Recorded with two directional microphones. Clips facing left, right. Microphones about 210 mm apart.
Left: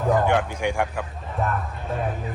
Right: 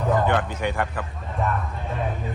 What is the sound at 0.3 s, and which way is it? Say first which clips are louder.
Speech: left 1 dB; 10° left (ahead or behind).